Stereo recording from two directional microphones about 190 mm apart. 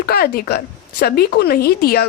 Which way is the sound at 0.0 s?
55° left (ahead or behind).